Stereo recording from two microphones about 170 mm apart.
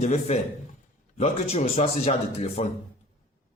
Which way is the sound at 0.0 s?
45° left (ahead or behind).